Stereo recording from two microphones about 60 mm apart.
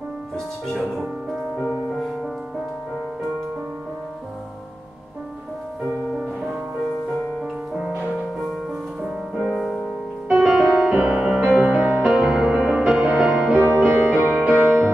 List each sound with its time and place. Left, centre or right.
0.7 s music: centre
1.3 s music: centre
9.4 s music: centre
10.5 s music: centre
12.0 s music: centre
13.0 s music: centre
13.6 s music: right
14.3 s music: centre